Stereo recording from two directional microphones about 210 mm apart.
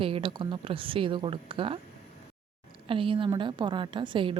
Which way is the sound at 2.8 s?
25° right (ahead or behind).